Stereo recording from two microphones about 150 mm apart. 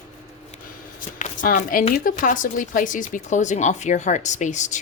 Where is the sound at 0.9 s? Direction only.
60° left (ahead or behind).